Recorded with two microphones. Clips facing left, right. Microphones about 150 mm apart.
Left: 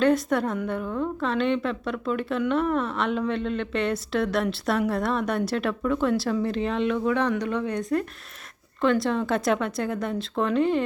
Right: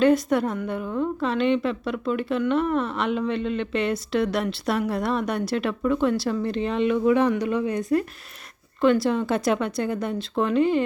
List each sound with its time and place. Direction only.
0.0 s a woman's voice: centre (ahead or behind)